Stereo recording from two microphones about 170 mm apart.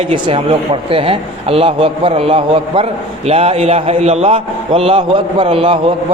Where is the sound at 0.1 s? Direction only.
30° right (ahead or behind).